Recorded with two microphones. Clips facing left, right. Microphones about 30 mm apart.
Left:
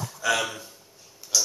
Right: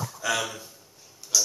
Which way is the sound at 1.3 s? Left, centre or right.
Centre.